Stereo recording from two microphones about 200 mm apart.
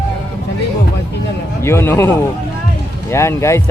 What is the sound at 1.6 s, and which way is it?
Speech, 10° left (ahead or behind).